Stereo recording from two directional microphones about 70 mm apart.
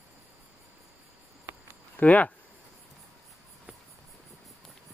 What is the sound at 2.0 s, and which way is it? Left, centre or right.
Speech, centre.